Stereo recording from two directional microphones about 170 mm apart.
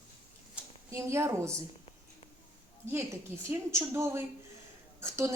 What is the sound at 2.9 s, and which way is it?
A woman's voice, 15° right (ahead or behind).